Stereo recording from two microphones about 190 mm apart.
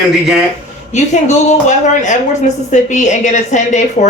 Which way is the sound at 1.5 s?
40° left (ahead or behind).